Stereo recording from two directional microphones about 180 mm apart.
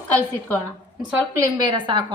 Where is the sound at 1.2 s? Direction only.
20° right (ahead or behind).